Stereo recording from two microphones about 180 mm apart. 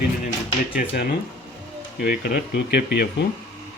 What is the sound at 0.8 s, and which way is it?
Speech, 50° left (ahead or behind).